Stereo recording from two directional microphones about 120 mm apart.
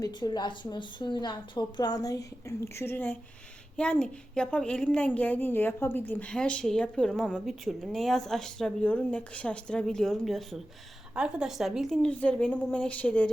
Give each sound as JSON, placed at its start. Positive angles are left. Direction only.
{"t": 0.0, "sound": "a woman's voice", "side_deg": 40}